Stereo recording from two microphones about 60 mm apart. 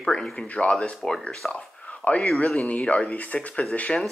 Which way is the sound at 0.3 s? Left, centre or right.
Left.